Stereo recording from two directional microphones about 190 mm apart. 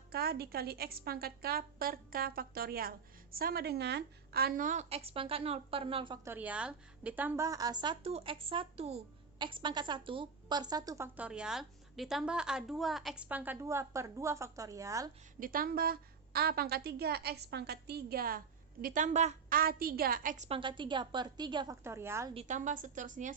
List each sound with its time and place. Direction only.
0.1 s a woman's voice: 55° right (ahead or behind); by 6.1 s 30° right (ahead or behind)
6.2 s a woman's voice: 10° right (ahead or behind)
15.4 s a woman's voice: 50° right (ahead or behind)
19.5 s a woman's voice: 50° right (ahead or behind)
20.6 s a woman's voice: 25° right (ahead or behind)
22.4 s a woman's voice: 40° right (ahead or behind)